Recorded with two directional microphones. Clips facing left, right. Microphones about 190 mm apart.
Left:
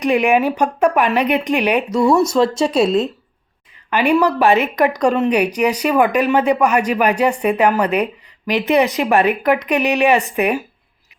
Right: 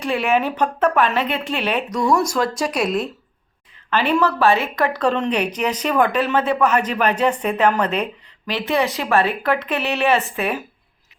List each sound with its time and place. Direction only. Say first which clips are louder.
0.0 s speech: left 5 dB; 15° left (ahead or behind)
1.9 s a woman's voice: left 4 dB; 25° left (ahead or behind)
3.8 s speech: left 4 dB; 15° left (ahead or behind)